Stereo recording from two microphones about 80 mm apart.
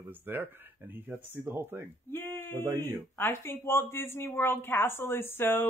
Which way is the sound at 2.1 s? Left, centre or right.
Left.